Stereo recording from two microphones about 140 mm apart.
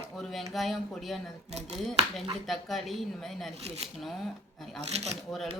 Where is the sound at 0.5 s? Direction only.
Centre (ahead or behind).